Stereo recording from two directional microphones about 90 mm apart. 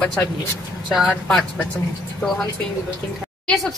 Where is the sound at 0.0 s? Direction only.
10° left (ahead or behind).